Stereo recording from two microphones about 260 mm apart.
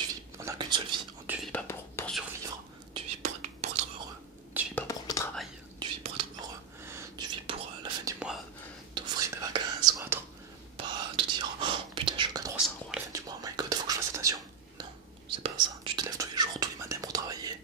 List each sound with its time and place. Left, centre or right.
0.4 s whispering: centre
1.2 s whispering: centre
1.5 s whispering: centre
2.9 s whispering: right
4.7 s whispering: centre
5.8 s whispering: centre
12.5 s whispering: centre
13.1 s whispering: centre